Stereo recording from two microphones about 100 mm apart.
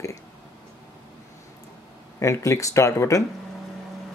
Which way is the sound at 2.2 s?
30° left (ahead or behind).